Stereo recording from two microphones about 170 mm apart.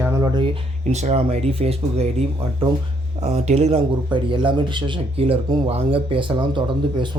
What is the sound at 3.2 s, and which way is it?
A man's voice, 40° right (ahead or behind).